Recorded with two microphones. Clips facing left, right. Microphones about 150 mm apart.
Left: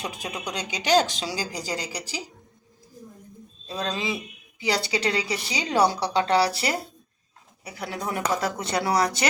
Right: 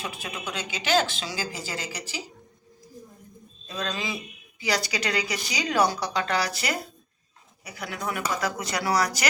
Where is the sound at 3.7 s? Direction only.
30° left (ahead or behind).